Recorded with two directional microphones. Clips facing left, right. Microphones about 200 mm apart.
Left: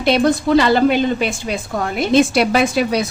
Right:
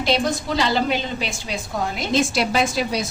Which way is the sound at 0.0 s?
60° left (ahead or behind).